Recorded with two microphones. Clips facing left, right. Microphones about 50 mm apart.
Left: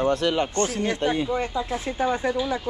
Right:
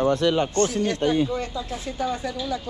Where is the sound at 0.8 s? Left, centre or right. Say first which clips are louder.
Right 2 dB; left.